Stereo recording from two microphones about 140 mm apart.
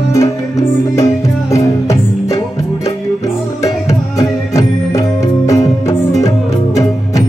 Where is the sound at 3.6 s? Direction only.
25° left (ahead or behind).